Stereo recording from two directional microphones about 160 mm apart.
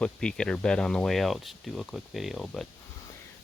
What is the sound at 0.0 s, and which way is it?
Speech, 5° left (ahead or behind).